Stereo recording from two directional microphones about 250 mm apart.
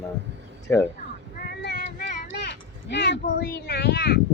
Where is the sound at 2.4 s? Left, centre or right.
Left.